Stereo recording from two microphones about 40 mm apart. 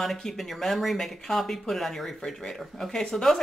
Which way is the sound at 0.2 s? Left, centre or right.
Centre.